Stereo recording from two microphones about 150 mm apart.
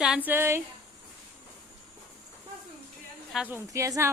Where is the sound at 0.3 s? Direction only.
15° right (ahead or behind).